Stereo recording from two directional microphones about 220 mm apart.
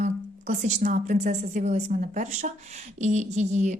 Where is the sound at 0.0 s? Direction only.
35° right (ahead or behind).